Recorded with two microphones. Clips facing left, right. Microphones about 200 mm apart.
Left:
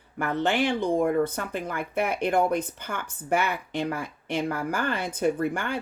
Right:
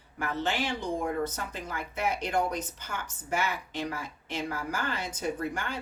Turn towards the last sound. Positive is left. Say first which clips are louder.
# left 6 dB
turn(degrees=60)  # may be behind; listen again after turning